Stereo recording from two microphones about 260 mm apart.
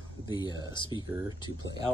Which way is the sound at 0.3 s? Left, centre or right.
Centre.